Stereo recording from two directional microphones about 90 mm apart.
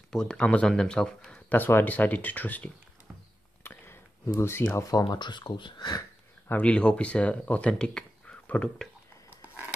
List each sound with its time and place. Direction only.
0.1 s speech: 10° left (ahead or behind)
1.5 s speech: 20° left (ahead or behind)
3.6 s a sound: 25° left (ahead or behind)
4.4 s speech: 25° left (ahead or behind)
4.8 s speech: 45° left (ahead or behind)
6.5 s speech: 10° left (ahead or behind)